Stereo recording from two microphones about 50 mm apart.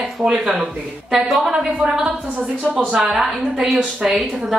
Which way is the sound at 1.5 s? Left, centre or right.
Centre.